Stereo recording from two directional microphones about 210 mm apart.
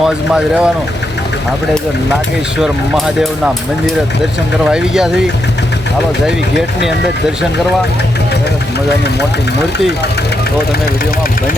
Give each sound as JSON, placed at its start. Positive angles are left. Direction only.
{"t": 0.0, "sound": "speech", "side_deg": -5}
{"t": 2.6, "sound": "speech", "side_deg": 0}